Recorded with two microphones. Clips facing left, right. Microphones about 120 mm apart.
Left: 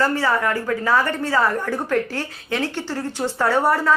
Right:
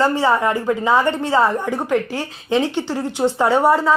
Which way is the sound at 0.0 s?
20° right (ahead or behind).